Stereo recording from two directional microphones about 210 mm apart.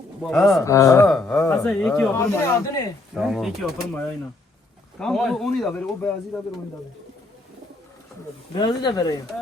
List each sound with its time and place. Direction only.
0.2 s speech: centre (ahead or behind)
0.6 s speech: 15° left (ahead or behind)
1.0 s speech: 5° left (ahead or behind)
3.2 s speech: centre (ahead or behind)
8.5 s speech: 20° left (ahead or behind)